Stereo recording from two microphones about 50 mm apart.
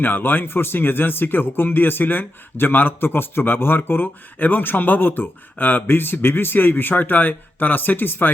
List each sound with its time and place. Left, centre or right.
0.0 s speech: left